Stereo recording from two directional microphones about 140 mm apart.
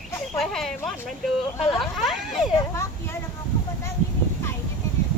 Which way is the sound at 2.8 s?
15° left (ahead or behind).